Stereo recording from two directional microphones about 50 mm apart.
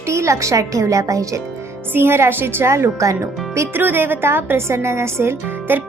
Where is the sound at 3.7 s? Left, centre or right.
Right.